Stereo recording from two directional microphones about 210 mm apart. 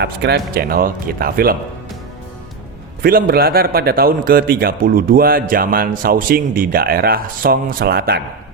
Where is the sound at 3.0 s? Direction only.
45° right (ahead or behind).